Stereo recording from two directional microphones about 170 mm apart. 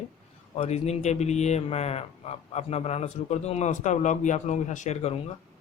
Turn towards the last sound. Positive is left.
turn(degrees=40)  # may be behind; listen again after turning